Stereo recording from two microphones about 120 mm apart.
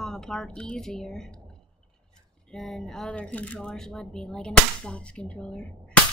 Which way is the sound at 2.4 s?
5° left (ahead or behind).